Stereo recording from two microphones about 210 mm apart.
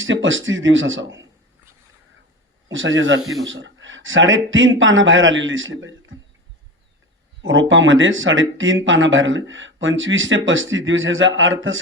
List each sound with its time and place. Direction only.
0.0 s speech: 65° right (ahead or behind)
2.6 s speech: 65° right (ahead or behind)
7.7 s speech: 65° right (ahead or behind)